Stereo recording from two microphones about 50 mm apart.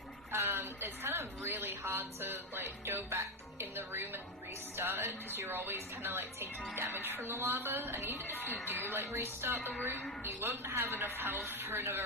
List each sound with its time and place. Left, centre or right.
0.3 s a woman's voice: right
8.1 s speech: left
9.0 s a woman's voice: right